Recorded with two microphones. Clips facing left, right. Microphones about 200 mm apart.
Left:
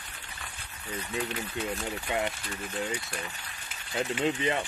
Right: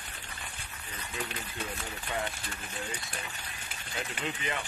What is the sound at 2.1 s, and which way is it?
Speech, 20° left (ahead or behind).